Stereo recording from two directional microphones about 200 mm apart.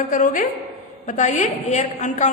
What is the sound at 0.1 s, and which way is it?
A woman's voice, 40° left (ahead or behind).